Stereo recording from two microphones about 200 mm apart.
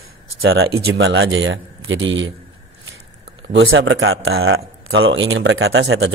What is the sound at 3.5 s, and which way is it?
Speech, 80° right.